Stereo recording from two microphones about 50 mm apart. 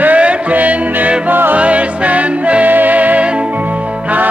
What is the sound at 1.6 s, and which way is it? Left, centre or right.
Music, right.